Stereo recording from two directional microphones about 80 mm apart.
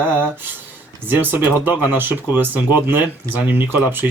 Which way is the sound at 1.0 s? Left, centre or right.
Right.